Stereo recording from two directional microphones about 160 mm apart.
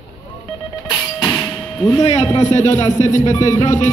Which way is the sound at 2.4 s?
45° left (ahead or behind).